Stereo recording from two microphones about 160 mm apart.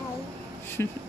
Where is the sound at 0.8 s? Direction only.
15° left (ahead or behind).